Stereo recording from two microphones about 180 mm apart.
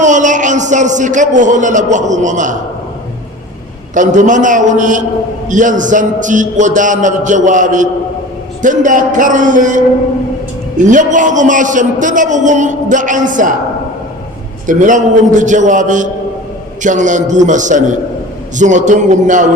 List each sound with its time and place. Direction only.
0.0 s a man's voice: 45° right (ahead or behind)
3.9 s a man's voice: 45° right (ahead or behind)
10.8 s a man's voice: 45° right (ahead or behind)
14.7 s a man's voice: 45° right (ahead or behind)